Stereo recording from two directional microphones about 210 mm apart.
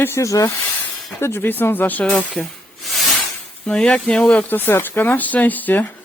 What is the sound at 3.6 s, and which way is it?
Speech, 5° left (ahead or behind).